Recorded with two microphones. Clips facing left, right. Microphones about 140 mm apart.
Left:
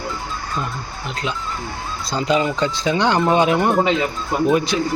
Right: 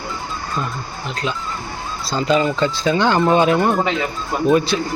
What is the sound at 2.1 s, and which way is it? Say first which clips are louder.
A man's voice: right 2 dB; 15° left (ahead or behind).